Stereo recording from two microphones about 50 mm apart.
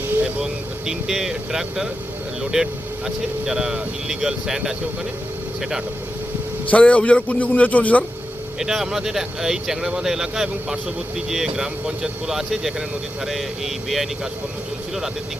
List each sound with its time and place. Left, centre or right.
0.1 s vehicle: right
0.9 s speech: centre
6.7 s a man's voice: left
8.5 s speech: centre